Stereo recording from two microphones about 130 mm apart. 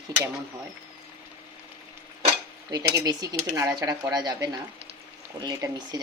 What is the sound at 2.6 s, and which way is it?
Speech, 30° right (ahead or behind).